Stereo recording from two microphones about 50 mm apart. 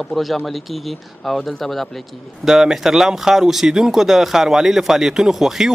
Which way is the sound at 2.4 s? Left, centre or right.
Centre.